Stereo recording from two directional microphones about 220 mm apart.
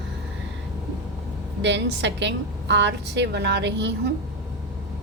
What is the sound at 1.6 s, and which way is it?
A woman's voice, 50° right (ahead or behind).